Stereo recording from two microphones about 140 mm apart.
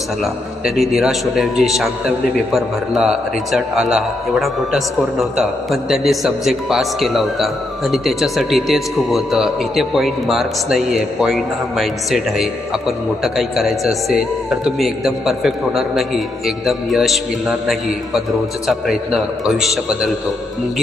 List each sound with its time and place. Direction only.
0.6 s a man's voice: 5° right (ahead or behind)